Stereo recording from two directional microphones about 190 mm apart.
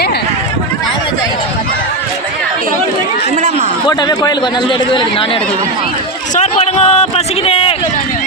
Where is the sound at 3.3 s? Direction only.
40° right (ahead or behind).